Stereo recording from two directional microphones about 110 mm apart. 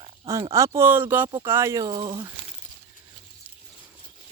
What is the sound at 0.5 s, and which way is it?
Speech, 30° right (ahead or behind).